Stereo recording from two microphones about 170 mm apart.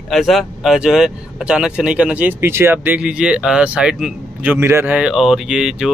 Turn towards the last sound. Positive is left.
turn(degrees=-5)  # may be behind; listen again after turning